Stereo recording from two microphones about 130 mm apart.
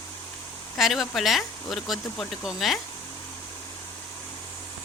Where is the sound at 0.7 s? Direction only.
Centre (ahead or behind).